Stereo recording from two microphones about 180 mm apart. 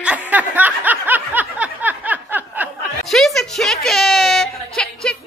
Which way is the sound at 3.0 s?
Centre (ahead or behind).